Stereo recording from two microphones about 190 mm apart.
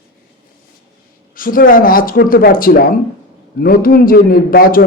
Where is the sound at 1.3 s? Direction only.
45° left (ahead or behind).